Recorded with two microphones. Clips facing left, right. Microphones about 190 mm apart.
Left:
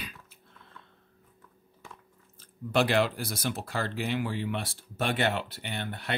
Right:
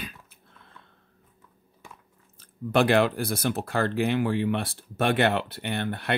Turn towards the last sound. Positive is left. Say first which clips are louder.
# right 7 dB
turn(degrees=-60)  # may be behind; listen again after turning